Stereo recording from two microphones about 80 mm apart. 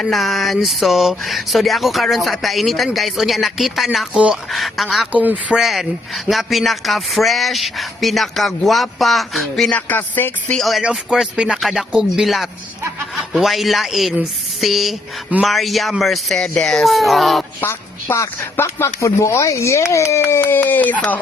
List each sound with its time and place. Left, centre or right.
0.0 s speech: centre
5.1 s speech: centre
5.5 s speech: centre
9.6 s speech: centre
10.5 s speech: centre
17.7 s speech: left